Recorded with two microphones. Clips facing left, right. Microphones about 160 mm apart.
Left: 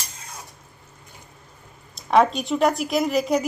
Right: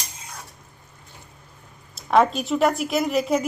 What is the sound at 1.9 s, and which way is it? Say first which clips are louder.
Speech: even; centre (ahead or behind).